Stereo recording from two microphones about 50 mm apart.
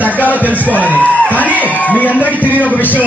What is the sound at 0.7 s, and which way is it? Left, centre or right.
A man's voice, left.